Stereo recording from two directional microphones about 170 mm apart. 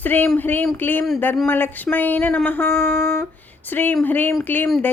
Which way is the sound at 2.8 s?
70° right (ahead or behind).